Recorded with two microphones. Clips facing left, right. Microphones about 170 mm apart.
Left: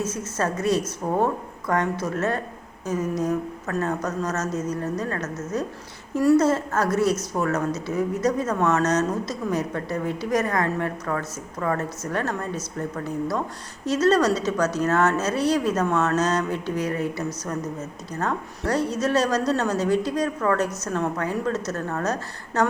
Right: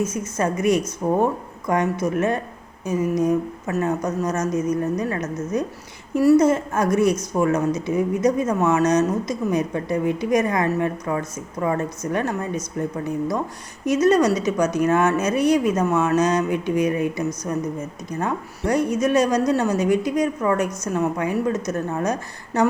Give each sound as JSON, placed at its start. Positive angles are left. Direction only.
{"t": 0.0, "sound": "a woman's voice", "side_deg": -10}
{"t": 13.8, "sound": "a woman's voice", "side_deg": -10}